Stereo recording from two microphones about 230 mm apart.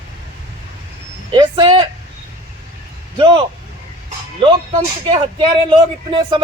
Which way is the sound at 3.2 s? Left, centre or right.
Right.